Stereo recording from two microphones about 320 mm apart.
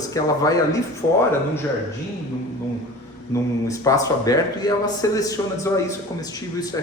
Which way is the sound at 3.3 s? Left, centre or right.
Centre.